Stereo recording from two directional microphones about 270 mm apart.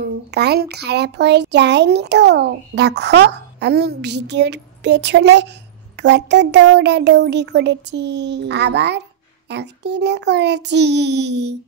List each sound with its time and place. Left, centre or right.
0.0 s a child's voice: right